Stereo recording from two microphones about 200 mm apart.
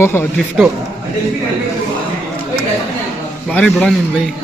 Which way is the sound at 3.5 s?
5° left (ahead or behind).